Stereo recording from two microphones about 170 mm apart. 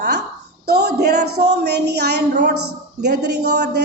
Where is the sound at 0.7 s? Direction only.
70° right (ahead or behind).